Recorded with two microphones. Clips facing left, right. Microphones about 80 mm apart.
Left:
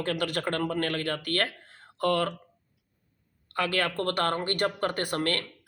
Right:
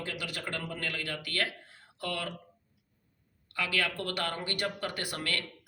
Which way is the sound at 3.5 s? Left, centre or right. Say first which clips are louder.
Left 5 dB; left.